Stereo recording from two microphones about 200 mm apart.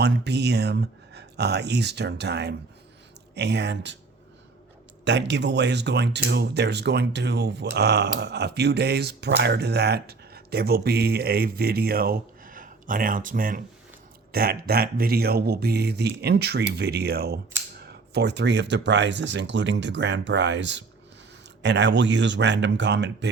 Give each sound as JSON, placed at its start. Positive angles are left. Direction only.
{"t": 0.0, "sound": "speech", "side_deg": -55}
{"t": 5.0, "sound": "speech", "side_deg": -65}